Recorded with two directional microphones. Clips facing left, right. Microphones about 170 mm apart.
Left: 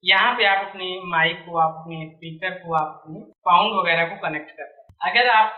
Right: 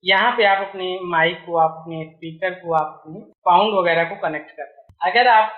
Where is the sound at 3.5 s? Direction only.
40° right (ahead or behind).